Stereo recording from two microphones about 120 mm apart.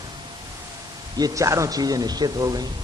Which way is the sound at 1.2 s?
25° right (ahead or behind).